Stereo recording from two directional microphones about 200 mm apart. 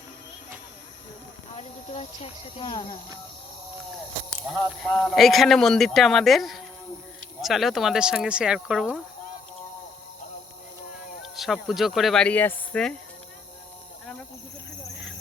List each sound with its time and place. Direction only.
1.5 s speech: 30° left (ahead or behind)
4.8 s speech: centre (ahead or behind)
11.2 s speech: centre (ahead or behind)